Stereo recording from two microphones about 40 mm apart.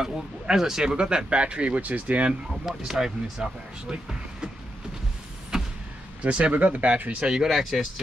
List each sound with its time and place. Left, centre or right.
0.0 s speech: centre; by 2.3 s right
2.6 s speech: centre
5.5 s vehicle: centre
6.2 s speech: right
7.2 s speech: centre
7.4 s speech: centre